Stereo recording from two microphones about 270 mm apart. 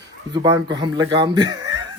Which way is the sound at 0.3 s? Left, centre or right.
Centre.